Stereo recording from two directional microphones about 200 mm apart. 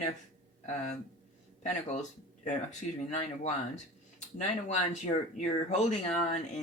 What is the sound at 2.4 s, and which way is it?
Speech, 35° left (ahead or behind).